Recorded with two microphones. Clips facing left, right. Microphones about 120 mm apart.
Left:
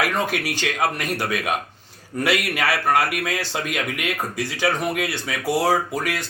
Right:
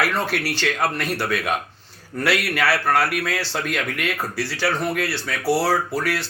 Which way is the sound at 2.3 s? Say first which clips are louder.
Right 2 dB; 50° left (ahead or behind).